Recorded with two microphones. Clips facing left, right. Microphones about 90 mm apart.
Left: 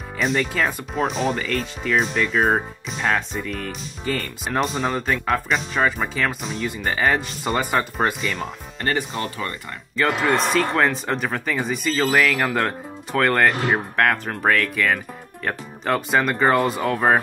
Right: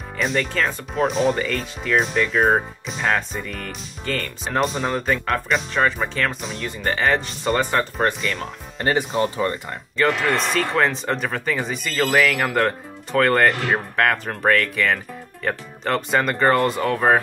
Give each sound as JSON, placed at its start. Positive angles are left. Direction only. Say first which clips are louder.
{"t": 0.2, "sound": "speech", "louder": "even", "side_deg": 0}
{"t": 0.9, "sound": "speech", "louder": "right 4 dB", "side_deg": 0}
{"t": 9.1, "sound": "speech", "louder": "right 6 dB", "side_deg": -15}
{"t": 10.0, "sound": "speech", "louder": "even", "side_deg": 0}
{"t": 13.5, "sound": "speech", "louder": "even", "side_deg": 20}
{"t": 13.9, "sound": "speech", "louder": "even", "side_deg": 0}